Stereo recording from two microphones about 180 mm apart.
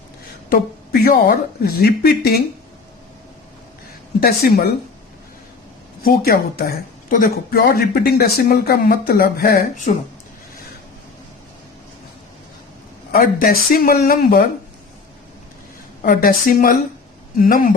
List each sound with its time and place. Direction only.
0.5 s speech: 60° left (ahead or behind)
4.2 s speech: 55° left (ahead or behind)
6.0 s speech: 55° left (ahead or behind)
13.1 s speech: 55° left (ahead or behind)
16.0 s speech: 50° left (ahead or behind)